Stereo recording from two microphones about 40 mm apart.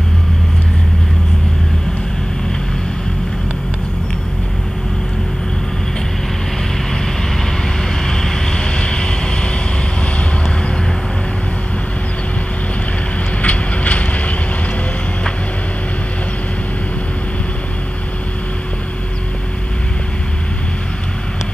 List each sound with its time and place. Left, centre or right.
8.0 s vehicle: centre
13.4 s train: left